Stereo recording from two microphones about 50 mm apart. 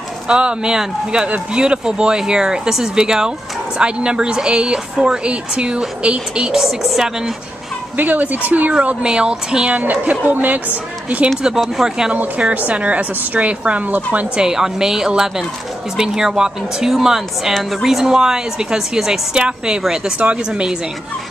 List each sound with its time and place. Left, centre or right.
0.3 s a woman's voice: right
8.0 s speech: right
8.7 s speech: centre
9.8 s speech: right
11.2 s speech: centre
12.1 s a woman's voice: right
14.3 s speech: centre